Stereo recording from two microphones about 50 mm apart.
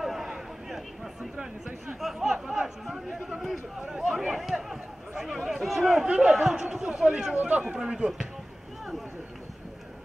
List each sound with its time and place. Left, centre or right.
0.0 s a sound: centre
1.3 s speech: right
2.1 s chatter: centre
3.3 s speech: centre
7.3 s a man's voice: right